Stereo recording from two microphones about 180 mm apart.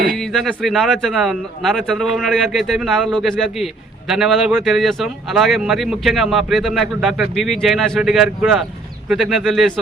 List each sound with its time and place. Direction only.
0.2 s speech: centre (ahead or behind)